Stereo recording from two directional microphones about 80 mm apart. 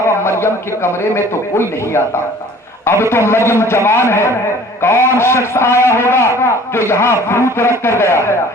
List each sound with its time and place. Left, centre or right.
0.3 s a man's voice: left